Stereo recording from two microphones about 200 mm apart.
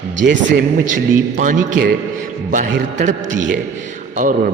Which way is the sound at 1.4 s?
40° right (ahead or behind).